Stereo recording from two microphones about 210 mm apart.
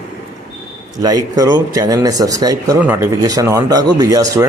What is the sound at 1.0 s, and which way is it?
A man's voice, 15° right (ahead or behind).